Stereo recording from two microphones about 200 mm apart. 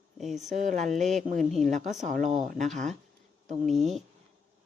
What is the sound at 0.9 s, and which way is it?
Speech, centre (ahead or behind).